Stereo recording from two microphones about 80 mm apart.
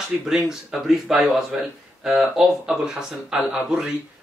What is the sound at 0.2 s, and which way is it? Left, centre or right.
A man's voice, centre.